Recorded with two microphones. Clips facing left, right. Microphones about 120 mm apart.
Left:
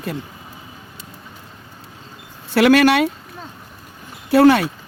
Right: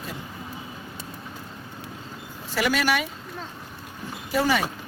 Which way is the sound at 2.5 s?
70° left (ahead or behind).